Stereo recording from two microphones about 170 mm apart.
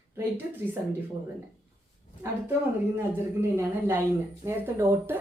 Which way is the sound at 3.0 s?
15° right (ahead or behind).